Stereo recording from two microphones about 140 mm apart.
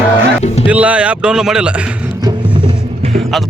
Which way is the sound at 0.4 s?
50° left (ahead or behind).